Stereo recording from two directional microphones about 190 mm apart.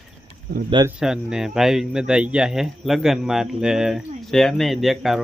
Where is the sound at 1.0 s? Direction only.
5° right (ahead or behind).